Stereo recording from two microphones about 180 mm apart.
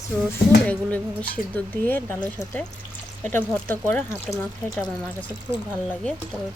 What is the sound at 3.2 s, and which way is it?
Speech, 10° left (ahead or behind).